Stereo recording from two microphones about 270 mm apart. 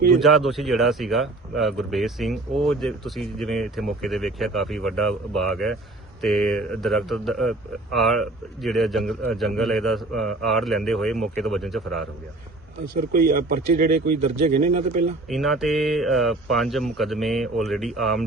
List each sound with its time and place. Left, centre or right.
0.2 s speech: centre
12.9 s speech: right
15.3 s speech: centre